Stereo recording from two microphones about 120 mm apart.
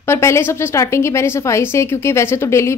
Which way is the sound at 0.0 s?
20° left (ahead or behind).